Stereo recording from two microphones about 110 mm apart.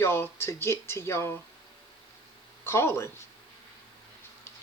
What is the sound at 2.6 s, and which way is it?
Speech, 20° left (ahead or behind).